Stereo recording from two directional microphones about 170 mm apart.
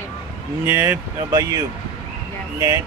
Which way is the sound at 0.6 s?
15° right (ahead or behind).